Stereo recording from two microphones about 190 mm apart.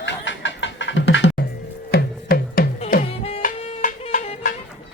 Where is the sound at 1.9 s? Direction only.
55° left (ahead or behind).